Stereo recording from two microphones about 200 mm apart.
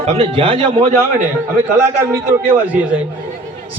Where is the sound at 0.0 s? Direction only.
30° right (ahead or behind).